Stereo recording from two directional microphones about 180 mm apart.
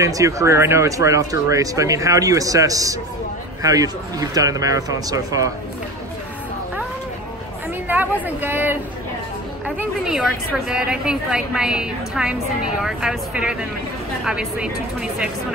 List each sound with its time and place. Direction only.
0.0 s speech: 15° right (ahead or behind)
7.9 s speech: 10° right (ahead or behind)
9.8 s a woman's voice: 5° right (ahead or behind)